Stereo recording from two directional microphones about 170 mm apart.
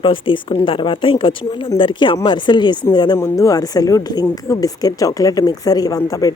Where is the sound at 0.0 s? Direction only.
30° left (ahead or behind).